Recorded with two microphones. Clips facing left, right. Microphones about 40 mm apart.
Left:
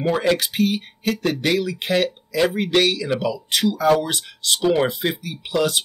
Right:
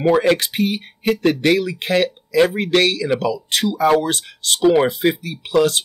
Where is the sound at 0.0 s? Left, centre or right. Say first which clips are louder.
Right 4 dB; right.